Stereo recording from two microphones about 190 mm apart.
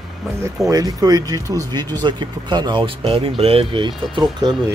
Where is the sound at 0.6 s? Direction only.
20° right (ahead or behind).